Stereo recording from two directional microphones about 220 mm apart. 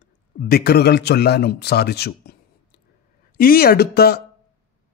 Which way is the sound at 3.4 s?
45° left (ahead or behind).